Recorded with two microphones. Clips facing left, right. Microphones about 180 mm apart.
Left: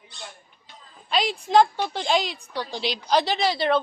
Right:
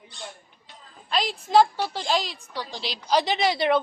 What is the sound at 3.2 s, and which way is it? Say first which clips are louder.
Speech: even; 20° right (ahead or behind).